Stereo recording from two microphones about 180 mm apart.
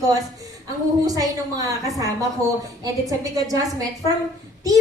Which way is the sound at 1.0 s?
20° right (ahead or behind).